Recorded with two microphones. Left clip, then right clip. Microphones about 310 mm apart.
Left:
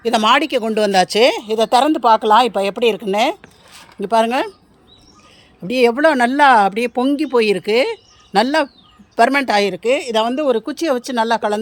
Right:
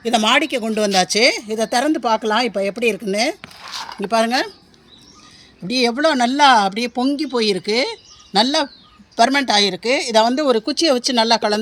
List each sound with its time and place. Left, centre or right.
0.0 s speech: centre
1.7 s speech: left
2.7 s speech: centre
5.6 s speech: centre